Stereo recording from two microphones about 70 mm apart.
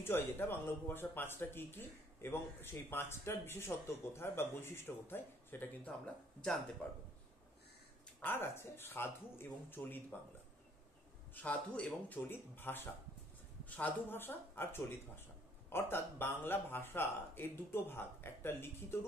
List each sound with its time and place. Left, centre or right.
0.0 s speech: left
8.2 s speech: left
11.3 s speech: left